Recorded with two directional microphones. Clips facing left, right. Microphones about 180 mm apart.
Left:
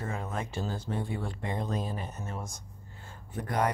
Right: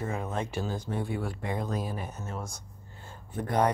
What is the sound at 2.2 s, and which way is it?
Speech, 15° left (ahead or behind).